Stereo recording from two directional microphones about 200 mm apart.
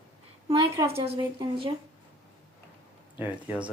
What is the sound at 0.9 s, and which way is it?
Speech, 30° right (ahead or behind).